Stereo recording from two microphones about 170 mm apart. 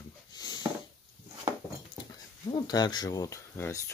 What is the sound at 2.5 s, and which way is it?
Speech, 25° left (ahead or behind).